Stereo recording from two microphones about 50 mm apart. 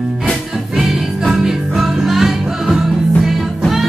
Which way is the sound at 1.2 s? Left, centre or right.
Centre.